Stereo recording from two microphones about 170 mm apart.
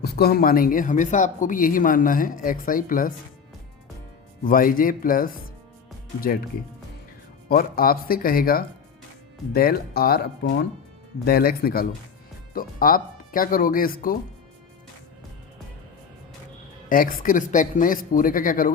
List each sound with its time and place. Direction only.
0.0 s speech: 65° left (ahead or behind)
4.4 s speech: 55° left (ahead or behind)
7.4 s speech: 60° left (ahead or behind)
16.9 s speech: 55° left (ahead or behind)